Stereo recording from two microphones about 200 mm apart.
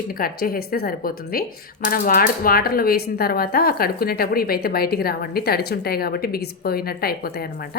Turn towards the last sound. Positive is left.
turn(degrees=50)  # may be behind; listen again after turning